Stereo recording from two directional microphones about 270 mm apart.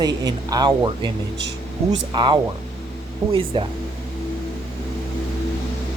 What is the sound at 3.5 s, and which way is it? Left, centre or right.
Speech, centre.